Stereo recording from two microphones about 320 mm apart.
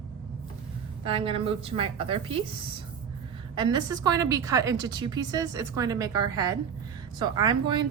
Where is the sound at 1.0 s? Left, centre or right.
Centre.